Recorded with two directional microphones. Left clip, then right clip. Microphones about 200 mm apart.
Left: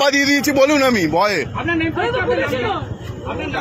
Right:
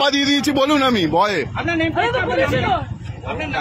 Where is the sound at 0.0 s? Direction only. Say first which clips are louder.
Left 2 dB; 5° right (ahead or behind).